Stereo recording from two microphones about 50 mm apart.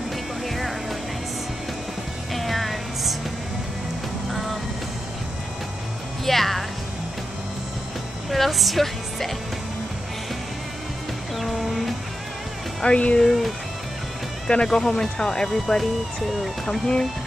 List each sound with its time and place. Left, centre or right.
0.5 s vehicle: centre
2.3 s music: centre
4.3 s vehicle: centre
6.2 s music: centre
8.3 s music: centre
11.3 s music: centre
12.8 s speech: left
13.2 s speech: centre
14.5 s speech: centre
16.8 s speech: centre